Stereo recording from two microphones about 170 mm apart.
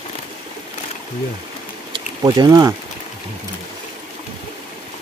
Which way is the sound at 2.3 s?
25° right (ahead or behind).